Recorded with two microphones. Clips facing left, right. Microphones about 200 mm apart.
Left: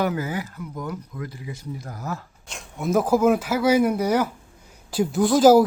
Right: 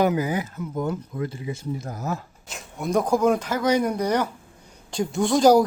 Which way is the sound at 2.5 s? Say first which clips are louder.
Left 2 dB; centre (ahead or behind).